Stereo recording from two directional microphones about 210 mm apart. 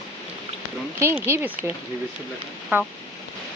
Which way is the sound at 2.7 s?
10° right (ahead or behind).